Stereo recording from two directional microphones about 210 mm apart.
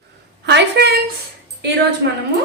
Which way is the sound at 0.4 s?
55° right (ahead or behind).